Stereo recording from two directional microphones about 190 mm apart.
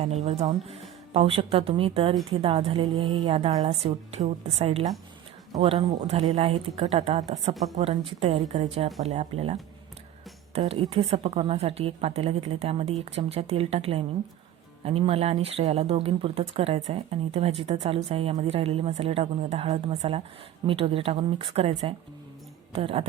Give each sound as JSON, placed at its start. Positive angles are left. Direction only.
{"t": 0.0, "sound": "speech", "side_deg": -35}